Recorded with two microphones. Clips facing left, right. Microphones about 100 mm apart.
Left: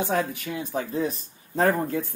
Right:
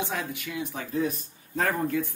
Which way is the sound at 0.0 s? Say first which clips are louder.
Left 6 dB; 40° left (ahead or behind).